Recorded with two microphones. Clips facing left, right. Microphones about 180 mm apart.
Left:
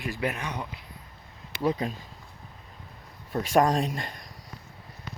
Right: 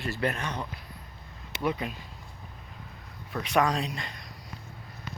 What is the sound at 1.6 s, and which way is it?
Speech, 35° left (ahead or behind).